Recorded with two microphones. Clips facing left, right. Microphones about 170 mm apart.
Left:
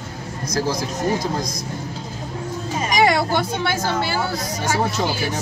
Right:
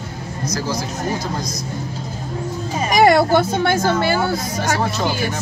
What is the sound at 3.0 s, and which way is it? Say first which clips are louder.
A woman's voice: right 6 dB; 45° right (ahead or behind).